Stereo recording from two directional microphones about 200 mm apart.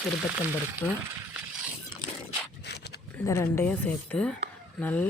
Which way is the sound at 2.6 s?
55° left (ahead or behind).